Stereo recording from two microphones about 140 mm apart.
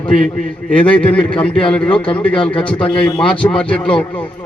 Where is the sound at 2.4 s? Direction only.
40° left (ahead or behind).